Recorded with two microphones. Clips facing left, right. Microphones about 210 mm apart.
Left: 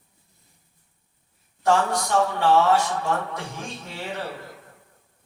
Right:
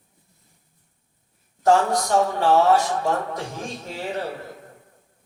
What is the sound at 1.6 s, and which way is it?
Speech, 40° right (ahead or behind).